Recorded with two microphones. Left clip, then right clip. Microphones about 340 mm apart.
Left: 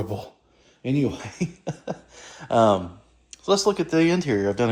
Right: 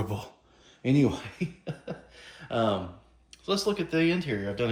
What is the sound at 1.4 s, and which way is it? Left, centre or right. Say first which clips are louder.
Speech: left 5 dB; centre.